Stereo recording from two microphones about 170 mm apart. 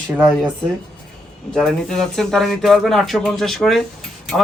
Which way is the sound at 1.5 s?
5° left (ahead or behind).